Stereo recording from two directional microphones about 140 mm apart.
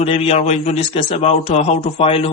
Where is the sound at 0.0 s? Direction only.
50° left (ahead or behind).